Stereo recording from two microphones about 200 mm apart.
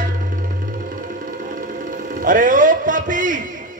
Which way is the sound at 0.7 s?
45° right (ahead or behind).